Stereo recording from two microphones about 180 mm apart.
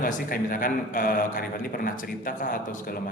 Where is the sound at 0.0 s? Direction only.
50° left (ahead or behind).